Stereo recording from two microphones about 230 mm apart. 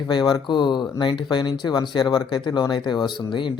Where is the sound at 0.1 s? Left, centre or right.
Centre.